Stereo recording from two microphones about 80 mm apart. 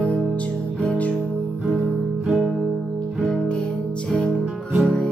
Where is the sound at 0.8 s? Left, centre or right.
Centre.